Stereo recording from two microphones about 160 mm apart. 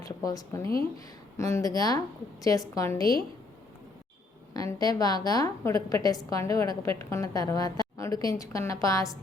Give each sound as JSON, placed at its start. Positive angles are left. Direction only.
{"t": 0.0, "sound": "a woman's voice", "side_deg": 20}
{"t": 4.5, "sound": "a woman's voice", "side_deg": 25}